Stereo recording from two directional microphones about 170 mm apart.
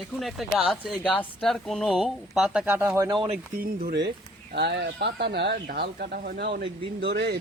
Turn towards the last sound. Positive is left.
turn(degrees=-80)